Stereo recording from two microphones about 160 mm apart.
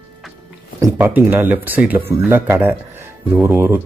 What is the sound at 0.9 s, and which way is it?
Speech, 10° right (ahead or behind).